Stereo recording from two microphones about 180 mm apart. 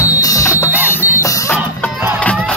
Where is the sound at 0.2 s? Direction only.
20° left (ahead or behind).